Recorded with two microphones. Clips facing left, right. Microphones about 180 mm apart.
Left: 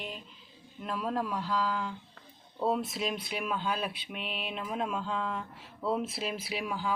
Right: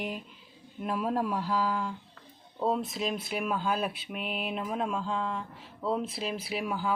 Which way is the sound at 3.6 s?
45° right (ahead or behind).